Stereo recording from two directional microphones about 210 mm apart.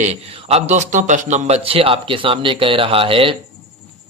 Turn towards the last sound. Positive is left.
turn(degrees=-25)  # may be behind; listen again after turning